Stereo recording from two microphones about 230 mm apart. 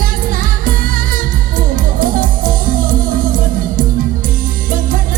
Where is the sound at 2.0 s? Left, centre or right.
Right.